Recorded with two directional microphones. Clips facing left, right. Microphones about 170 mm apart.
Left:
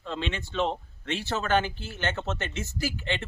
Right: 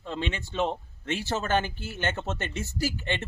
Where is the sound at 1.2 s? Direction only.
15° right (ahead or behind).